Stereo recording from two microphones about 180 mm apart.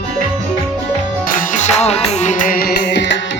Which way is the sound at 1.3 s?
45° left (ahead or behind).